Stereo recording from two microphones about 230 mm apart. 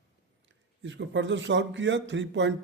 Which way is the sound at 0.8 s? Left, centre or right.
Right.